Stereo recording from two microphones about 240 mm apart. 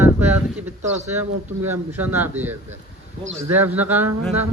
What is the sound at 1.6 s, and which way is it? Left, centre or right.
A man's voice, centre.